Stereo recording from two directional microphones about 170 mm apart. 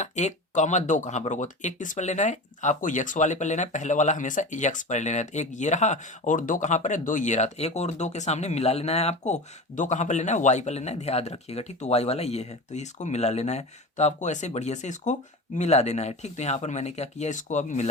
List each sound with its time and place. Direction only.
0.0 s speech: 45° left (ahead or behind)